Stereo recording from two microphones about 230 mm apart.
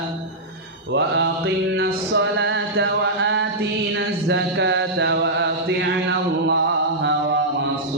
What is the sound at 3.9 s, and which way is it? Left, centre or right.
Chant, right.